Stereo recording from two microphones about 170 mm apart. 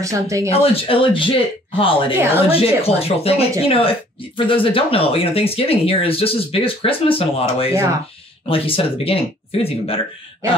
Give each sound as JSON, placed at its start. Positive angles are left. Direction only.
{"t": 0.0, "sound": "speech", "side_deg": -20}
{"t": 0.5, "sound": "speech", "side_deg": 35}